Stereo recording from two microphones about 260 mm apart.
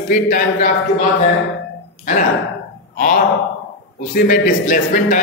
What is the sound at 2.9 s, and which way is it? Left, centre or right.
A man's voice, left.